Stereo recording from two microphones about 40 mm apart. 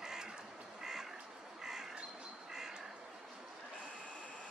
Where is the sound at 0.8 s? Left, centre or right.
Centre.